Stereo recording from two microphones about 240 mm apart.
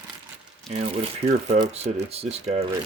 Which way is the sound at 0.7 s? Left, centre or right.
Right.